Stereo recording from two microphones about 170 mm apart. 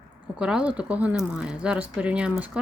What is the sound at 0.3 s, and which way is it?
Speech, 5° right (ahead or behind).